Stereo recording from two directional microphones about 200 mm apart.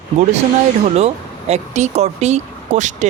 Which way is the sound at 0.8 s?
35° right (ahead or behind).